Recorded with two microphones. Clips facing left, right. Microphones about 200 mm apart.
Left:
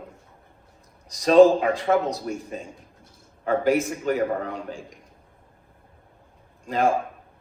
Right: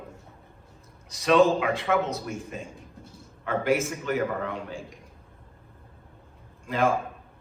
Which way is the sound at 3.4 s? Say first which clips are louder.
Left 4 dB; 35° left (ahead or behind).